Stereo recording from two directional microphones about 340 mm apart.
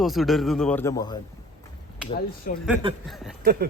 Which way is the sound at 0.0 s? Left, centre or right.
Centre.